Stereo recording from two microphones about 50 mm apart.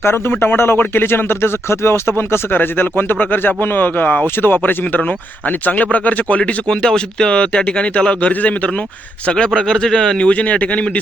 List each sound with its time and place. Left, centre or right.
0.0 s speech: left
6.7 s speech: centre; by 8.7 s left
9.2 s a man's voice: centre